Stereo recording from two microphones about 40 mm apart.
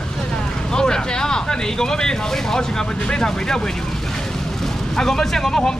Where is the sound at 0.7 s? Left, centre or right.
Centre.